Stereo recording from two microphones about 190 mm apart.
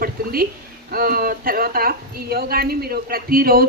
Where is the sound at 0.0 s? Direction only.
50° right (ahead or behind).